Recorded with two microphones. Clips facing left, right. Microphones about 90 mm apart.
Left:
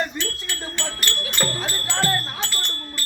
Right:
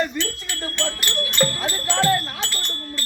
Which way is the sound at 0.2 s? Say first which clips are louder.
Right 2 dB; centre (ahead or behind).